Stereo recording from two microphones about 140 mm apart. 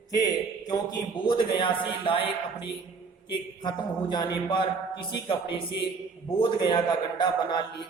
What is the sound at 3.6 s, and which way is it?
A man's voice, 30° left (ahead or behind).